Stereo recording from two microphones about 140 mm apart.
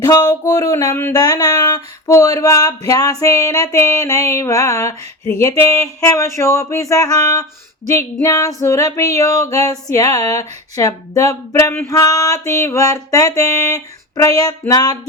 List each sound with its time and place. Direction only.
0.0 s female singing: 25° left (ahead or behind)